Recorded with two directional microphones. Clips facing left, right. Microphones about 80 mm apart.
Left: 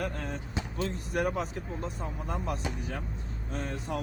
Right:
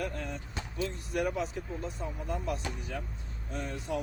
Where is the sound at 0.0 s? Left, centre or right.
Left.